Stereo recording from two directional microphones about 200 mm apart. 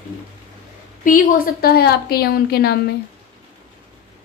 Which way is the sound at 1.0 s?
45° left (ahead or behind).